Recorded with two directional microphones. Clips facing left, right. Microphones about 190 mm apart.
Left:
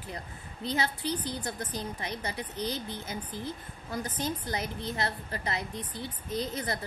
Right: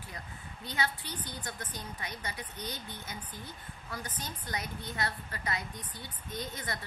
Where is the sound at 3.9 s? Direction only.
30° left (ahead or behind).